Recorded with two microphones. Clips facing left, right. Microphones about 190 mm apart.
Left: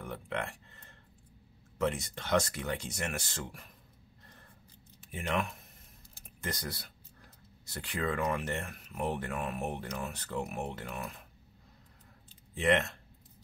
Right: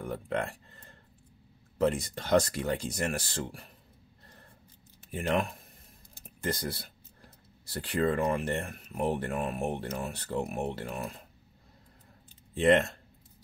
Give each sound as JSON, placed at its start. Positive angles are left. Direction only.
{"t": 0.0, "sound": "a sound", "side_deg": -35}
{"t": 1.8, "sound": "speech", "side_deg": -35}
{"t": 5.1, "sound": "speech", "side_deg": -35}
{"t": 12.5, "sound": "speech", "side_deg": -30}